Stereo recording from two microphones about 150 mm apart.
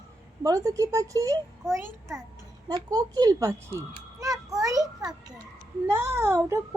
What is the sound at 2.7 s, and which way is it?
A woman's voice, 25° right (ahead or behind).